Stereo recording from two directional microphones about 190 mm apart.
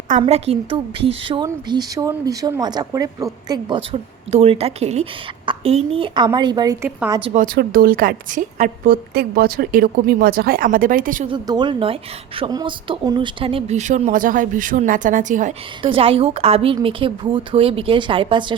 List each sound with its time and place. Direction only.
0.2 s a woman's voice: 30° right (ahead or behind)
3.5 s a woman's voice: 30° right (ahead or behind)
6.8 s a woman's voice: 10° right (ahead or behind)
7.3 s a woman's voice: 50° right (ahead or behind)
11.3 s a woman's voice: 25° right (ahead or behind); by 15.5 s 40° right (ahead or behind)
15.8 s a woman's voice: 30° right (ahead or behind)